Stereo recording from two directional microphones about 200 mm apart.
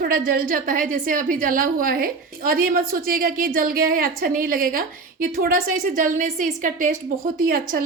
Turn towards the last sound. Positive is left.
turn(degrees=-45)  # may be behind; listen again after turning